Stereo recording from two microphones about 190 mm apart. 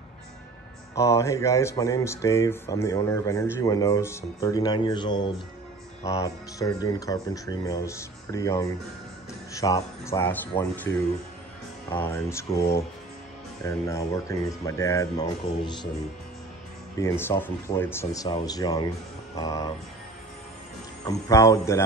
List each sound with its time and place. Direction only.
0.9 s speech: 15° left (ahead or behind)
10.5 s speech: 25° left (ahead or behind)
12.0 s speech: 15° left (ahead or behind)
17.0 s speech: 15° left (ahead or behind)
21.0 s speech: 15° left (ahead or behind)